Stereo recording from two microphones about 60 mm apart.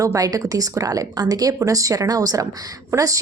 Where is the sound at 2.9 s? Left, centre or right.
Right.